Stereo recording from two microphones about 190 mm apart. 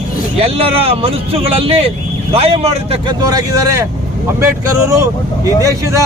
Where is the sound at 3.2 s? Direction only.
20° right (ahead or behind).